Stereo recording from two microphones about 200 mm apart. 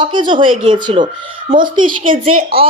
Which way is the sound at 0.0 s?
25° right (ahead or behind).